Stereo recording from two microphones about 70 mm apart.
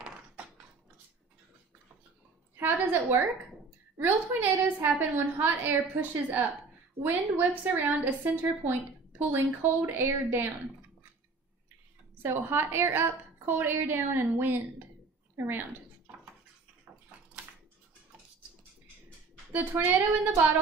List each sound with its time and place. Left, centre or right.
2.5 s a woman's voice: right
12.2 s a woman's voice: right
19.5 s a woman's voice: right